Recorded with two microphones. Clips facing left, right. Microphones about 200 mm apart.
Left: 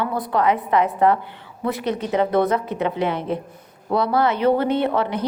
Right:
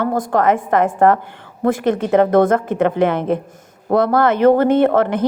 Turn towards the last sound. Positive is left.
turn(degrees=-50)  # may be behind; listen again after turning